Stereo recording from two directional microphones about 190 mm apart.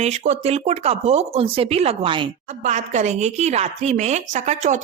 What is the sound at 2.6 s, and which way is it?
Speech, 35° right (ahead or behind).